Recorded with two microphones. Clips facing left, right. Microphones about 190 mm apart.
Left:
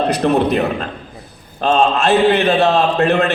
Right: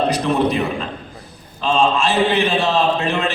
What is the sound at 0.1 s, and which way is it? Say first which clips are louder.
A man's voice: left 3 dB; 60° left (ahead or behind).